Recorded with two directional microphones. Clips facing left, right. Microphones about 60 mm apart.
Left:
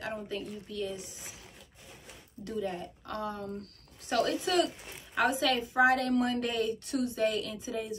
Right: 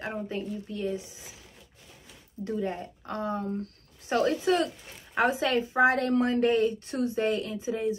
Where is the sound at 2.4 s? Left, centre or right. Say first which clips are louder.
Right 3 dB; right.